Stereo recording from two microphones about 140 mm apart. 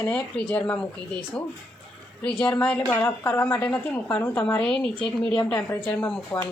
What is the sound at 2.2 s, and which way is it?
Speech, 40° left (ahead or behind).